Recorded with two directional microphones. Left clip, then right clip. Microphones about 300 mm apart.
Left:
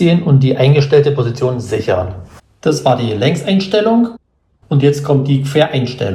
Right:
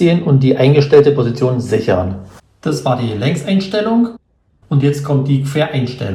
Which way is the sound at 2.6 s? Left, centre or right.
Centre.